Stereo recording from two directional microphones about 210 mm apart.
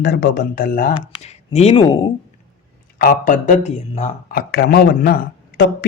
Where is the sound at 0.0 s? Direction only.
50° left (ahead or behind); by 2.1 s 25° left (ahead or behind).